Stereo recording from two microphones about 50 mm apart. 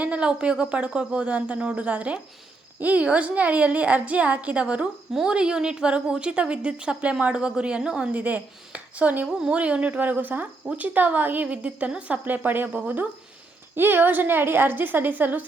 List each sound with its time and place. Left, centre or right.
0.0 s a sound: right
0.6 s a woman's voice: right
8.1 s a woman's voice: right
9.9 s a woman's voice: right
12.2 s a woman's voice: right
13.7 s a woman's voice: right